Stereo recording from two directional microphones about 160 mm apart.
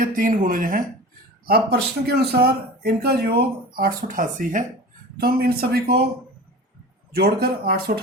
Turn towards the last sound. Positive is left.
turn(degrees=-70)  # may be behind; listen again after turning